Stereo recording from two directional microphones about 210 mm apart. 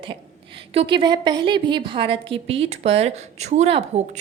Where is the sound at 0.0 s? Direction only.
25° right (ahead or behind).